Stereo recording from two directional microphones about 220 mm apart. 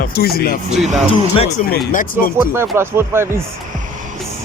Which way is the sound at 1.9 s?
35° left (ahead or behind).